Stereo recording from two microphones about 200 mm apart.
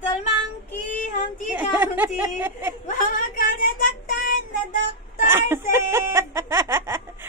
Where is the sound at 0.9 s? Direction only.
40° left (ahead or behind).